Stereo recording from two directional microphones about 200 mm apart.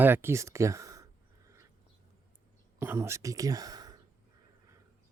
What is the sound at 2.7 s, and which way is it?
Speech, 10° right (ahead or behind).